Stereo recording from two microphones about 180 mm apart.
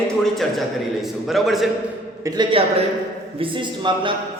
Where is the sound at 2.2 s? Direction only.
25° right (ahead or behind).